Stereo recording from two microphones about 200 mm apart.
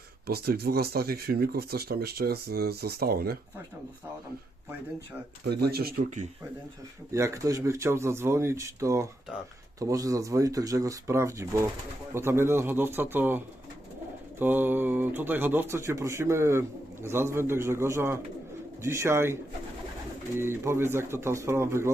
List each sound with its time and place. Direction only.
0.3 s speech: 50° right (ahead or behind)
5.5 s speech: 55° right (ahead or behind)
7.1 s speech: 15° right (ahead or behind)